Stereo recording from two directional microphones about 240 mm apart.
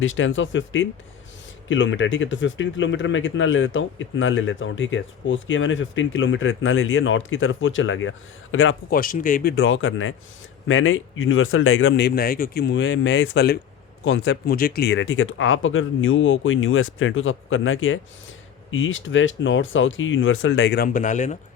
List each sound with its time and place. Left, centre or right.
0.0 s speech: left
8.9 s speech: left